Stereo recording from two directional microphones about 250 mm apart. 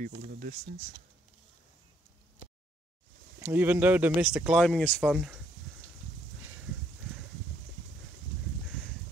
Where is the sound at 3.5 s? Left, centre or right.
Centre.